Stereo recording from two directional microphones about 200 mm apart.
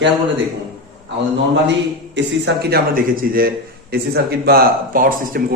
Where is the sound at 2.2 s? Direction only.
60° right (ahead or behind).